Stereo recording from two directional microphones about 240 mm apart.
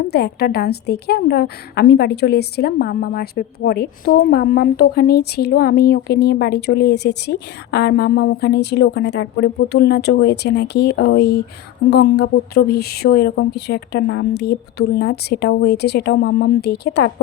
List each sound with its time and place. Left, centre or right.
0.1 s a woman's voice: left